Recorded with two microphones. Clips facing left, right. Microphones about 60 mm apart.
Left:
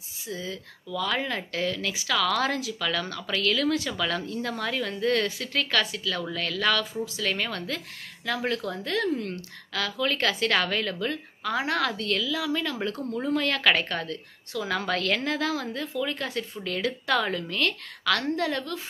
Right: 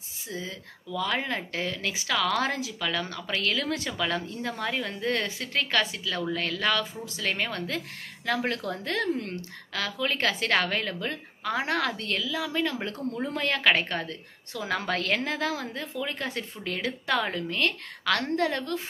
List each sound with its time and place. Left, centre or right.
0.3 s a woman's voice: right